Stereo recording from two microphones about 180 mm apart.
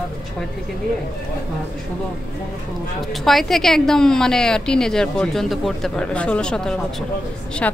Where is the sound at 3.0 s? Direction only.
Centre (ahead or behind).